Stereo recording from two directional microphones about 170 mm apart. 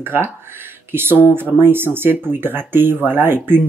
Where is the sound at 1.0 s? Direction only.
10° left (ahead or behind).